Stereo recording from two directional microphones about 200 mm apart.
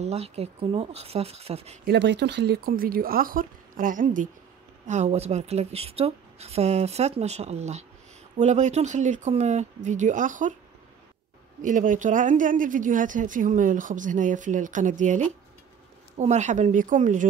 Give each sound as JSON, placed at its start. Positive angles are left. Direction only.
{"t": 0.0, "sound": "speech", "side_deg": -30}
{"t": 1.9, "sound": "speech", "side_deg": -60}
{"t": 11.6, "sound": "speech", "side_deg": -40}